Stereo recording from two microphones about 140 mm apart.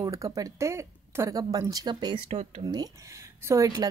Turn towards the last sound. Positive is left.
turn(degrees=-25)  # may be behind; listen again after turning